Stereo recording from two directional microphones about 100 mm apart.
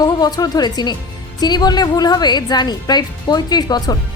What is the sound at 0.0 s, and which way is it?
A woman's voice, 40° left (ahead or behind).